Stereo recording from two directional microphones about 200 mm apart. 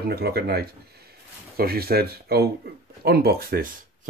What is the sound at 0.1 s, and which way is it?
Speech, 50° right (ahead or behind).